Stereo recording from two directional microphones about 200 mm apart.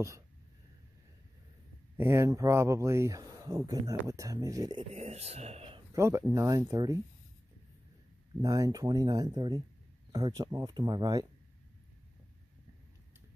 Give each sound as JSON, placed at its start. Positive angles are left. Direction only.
{"t": 2.0, "sound": "speech", "side_deg": -15}
{"t": 4.9, "sound": "speech", "side_deg": -30}
{"t": 5.9, "sound": "speech", "side_deg": -15}
{"t": 8.4, "sound": "speech", "side_deg": -20}